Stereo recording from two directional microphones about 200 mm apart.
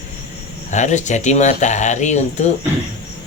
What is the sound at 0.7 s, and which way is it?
Speech, 35° left (ahead or behind).